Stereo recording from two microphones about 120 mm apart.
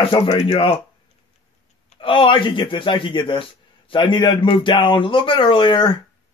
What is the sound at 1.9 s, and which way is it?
A man's voice, 50° left (ahead or behind).